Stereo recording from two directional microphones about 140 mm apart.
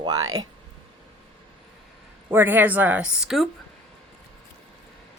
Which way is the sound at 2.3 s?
15° right (ahead or behind).